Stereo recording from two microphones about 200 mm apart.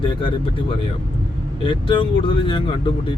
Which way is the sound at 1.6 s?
25° left (ahead or behind).